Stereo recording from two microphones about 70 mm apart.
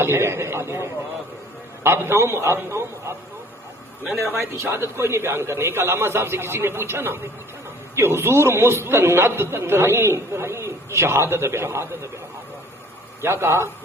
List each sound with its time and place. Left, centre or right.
0.0 s a man's voice: right
4.2 s a man's voice: right
13.2 s a man's voice: right